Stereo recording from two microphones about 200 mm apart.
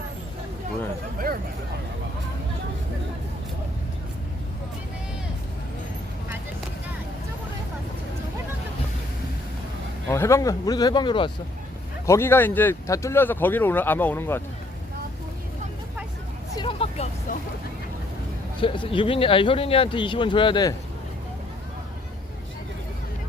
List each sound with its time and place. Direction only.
10.1 s speech: 15° left (ahead or behind)
12.0 s speech: 15° left (ahead or behind)
16.6 s hubbub: 25° left (ahead or behind)
18.6 s speech: 25° left (ahead or behind)